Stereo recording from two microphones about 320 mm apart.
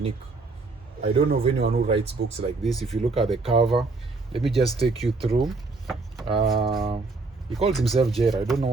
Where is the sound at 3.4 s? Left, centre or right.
Centre.